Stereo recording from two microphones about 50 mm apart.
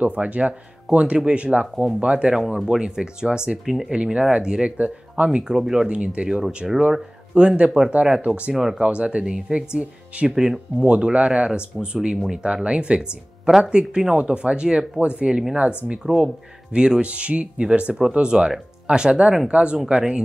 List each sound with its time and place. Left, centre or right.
0.0 s speech: right
2.3 s speech: centre
3.6 s speech: centre
3.9 s speech: right
5.9 s speech: right
6.6 s speech: centre
7.3 s speech: right
8.5 s speech: centre
8.8 s speech: right
10.2 s speech: centre
10.9 s speech: right